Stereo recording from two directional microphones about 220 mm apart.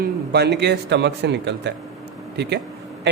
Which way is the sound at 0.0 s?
50° right (ahead or behind).